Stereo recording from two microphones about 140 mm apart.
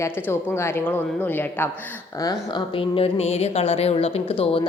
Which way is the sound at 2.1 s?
25° left (ahead or behind).